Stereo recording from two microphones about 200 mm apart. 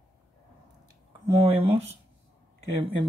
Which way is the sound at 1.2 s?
25° right (ahead or behind).